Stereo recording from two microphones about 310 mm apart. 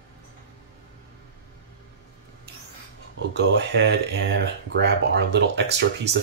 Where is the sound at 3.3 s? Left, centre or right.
Right.